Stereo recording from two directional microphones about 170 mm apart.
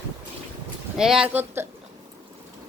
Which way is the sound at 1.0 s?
5° right (ahead or behind).